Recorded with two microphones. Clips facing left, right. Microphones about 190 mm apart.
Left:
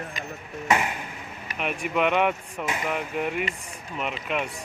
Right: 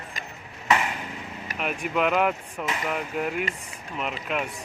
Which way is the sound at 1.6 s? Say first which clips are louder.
Left 1 dB; centre (ahead or behind).